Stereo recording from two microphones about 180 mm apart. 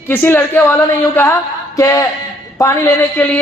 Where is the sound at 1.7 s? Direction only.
20° left (ahead or behind).